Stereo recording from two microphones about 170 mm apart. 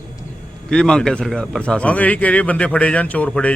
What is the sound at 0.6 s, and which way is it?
Speech, 5° left (ahead or behind).